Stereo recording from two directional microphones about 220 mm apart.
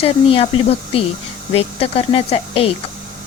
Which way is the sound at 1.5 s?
25° left (ahead or behind).